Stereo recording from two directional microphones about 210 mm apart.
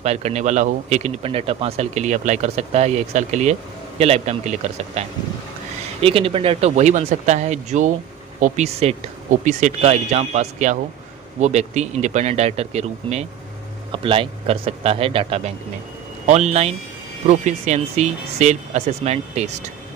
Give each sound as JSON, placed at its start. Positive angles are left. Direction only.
{"t": 0.0, "sound": "speech", "side_deg": -30}